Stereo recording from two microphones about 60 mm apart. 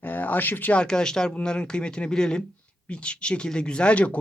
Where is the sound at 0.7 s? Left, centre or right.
Centre.